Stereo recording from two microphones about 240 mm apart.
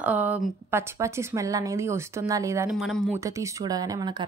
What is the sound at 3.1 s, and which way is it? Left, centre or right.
A woman's voice, centre.